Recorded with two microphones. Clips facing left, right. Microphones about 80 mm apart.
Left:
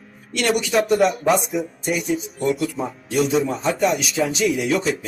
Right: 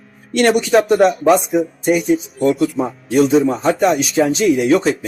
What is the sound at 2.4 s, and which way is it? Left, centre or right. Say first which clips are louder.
Speech: right 6 dB; right.